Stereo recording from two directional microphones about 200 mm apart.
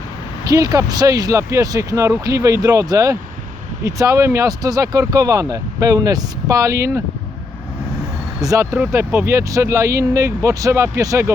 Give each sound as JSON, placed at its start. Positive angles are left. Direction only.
{"t": 0.4, "sound": "speech", "side_deg": -15}
{"t": 8.4, "sound": "speech", "side_deg": -15}